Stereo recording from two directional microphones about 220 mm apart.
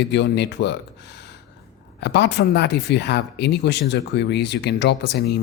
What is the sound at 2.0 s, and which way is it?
Speech, 50° left (ahead or behind).